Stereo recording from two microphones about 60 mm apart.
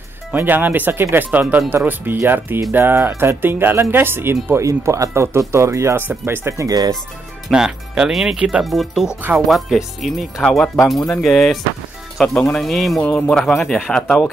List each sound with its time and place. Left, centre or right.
0.3 s speech: right
4.6 s speech: right
6.0 s speech: right
6.5 s speech: right
7.5 s speech: centre
8.6 s a man's voice: centre